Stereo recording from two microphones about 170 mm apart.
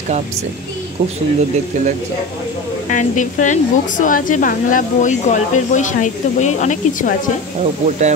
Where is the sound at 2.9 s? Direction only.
50° left (ahead or behind).